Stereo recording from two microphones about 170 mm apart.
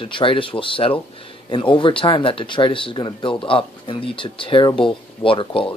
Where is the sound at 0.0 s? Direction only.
30° left (ahead or behind).